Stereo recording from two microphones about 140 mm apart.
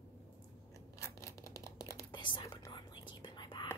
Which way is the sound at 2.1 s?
35° left (ahead or behind).